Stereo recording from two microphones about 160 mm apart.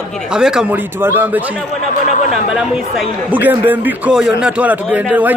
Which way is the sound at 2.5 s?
5° right (ahead or behind).